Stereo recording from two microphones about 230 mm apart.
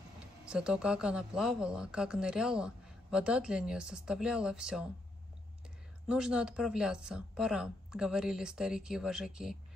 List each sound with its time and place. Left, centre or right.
0.2 s speech: centre
6.0 s speech: centre